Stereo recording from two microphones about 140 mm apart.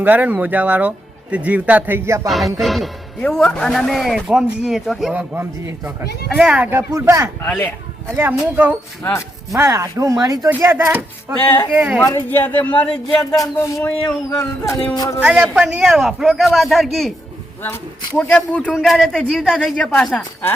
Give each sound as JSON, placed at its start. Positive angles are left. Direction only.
{"t": 0.0, "sound": "speech", "side_deg": -10}
{"t": 2.2, "sound": "a man's voice", "side_deg": 0}
{"t": 5.3, "sound": "speech", "side_deg": -15}
{"t": 7.4, "sound": "a man's voice", "side_deg": 15}
{"t": 8.1, "sound": "speech", "side_deg": -15}
{"t": 11.4, "sound": "a man's voice", "side_deg": 15}
{"t": 11.7, "sound": "speech", "side_deg": -10}
{"t": 12.0, "sound": "a man's voice", "side_deg": 15}
{"t": 13.4, "sound": "speech", "side_deg": 20}
{"t": 15.2, "sound": "a man's voice", "side_deg": -5}
{"t": 18.2, "sound": "a man's voice", "side_deg": 10}
{"t": 18.7, "sound": "a man's voice", "side_deg": 0}